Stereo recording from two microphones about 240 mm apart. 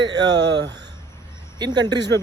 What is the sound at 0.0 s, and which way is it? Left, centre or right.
Speech, right.